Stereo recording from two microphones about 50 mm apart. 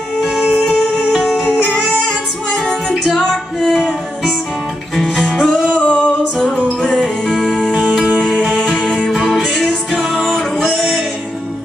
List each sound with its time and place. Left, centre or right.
0.2 s music: centre
2.0 s music: centre
3.7 s music: centre
5.1 s music: centre
5.8 s singing: centre
7.3 s music: centre
9.2 s music: centre
9.6 s music: centre
10.0 s music: centre